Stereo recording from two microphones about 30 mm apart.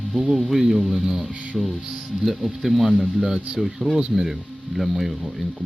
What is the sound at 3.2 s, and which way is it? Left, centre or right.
Speech, right.